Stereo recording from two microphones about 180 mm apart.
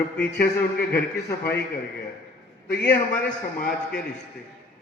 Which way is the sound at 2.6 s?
60° left (ahead or behind).